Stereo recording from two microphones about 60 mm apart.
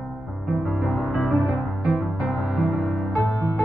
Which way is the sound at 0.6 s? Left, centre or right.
Centre.